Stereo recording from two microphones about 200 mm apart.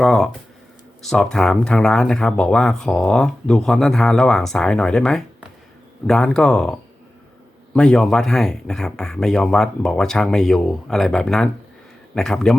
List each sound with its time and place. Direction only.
0.0 s speech: centre (ahead or behind)